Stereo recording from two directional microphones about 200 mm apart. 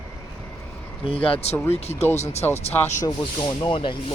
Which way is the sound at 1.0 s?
25° left (ahead or behind).